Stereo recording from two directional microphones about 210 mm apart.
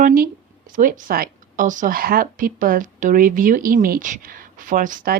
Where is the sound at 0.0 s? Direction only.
40° right (ahead or behind).